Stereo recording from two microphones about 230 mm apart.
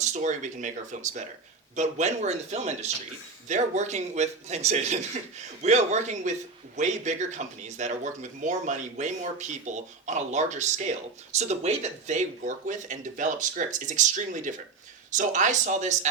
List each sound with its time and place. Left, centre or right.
0.0 s a man's voice: right